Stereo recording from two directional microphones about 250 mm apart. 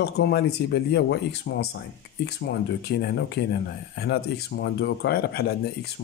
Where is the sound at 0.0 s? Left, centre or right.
Left.